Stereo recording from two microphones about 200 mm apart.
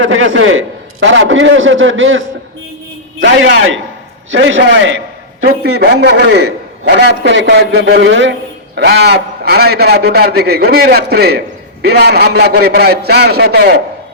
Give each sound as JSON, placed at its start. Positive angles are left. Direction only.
{"t": 0.0, "sound": "a man's voice", "side_deg": -85}
{"t": 5.4, "sound": "a man's voice", "side_deg": -55}